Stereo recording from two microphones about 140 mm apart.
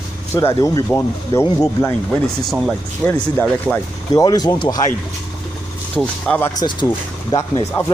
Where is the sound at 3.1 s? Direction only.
10° left (ahead or behind).